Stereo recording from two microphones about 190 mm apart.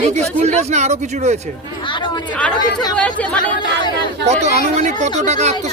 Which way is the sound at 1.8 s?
25° left (ahead or behind).